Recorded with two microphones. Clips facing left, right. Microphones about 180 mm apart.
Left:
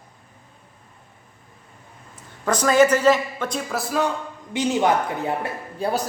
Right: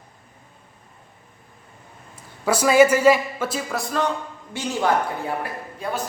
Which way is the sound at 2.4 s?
10° right (ahead or behind).